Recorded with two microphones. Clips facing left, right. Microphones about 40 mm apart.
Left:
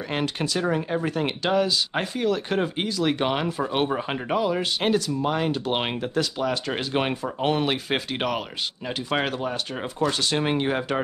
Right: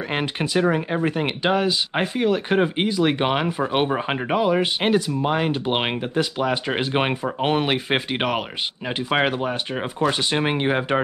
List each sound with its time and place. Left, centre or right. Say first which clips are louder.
0.1 s speech: right 3 dB; right